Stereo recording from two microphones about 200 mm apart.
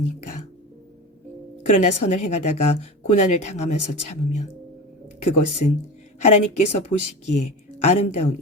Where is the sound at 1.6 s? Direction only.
35° left (ahead or behind).